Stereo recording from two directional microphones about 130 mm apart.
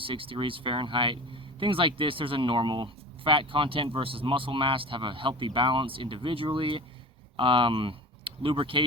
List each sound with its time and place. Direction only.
0.0 s speech: 45° right (ahead or behind)